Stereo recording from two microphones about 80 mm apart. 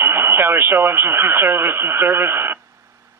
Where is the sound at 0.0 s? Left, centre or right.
Right.